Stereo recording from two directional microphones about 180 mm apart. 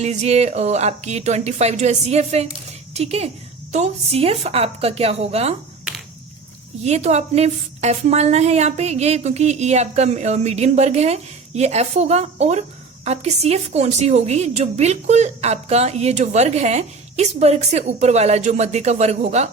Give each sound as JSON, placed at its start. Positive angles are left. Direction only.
{"t": 0.0, "sound": "a woman's voice", "side_deg": -40}
{"t": 6.8, "sound": "a woman's voice", "side_deg": -40}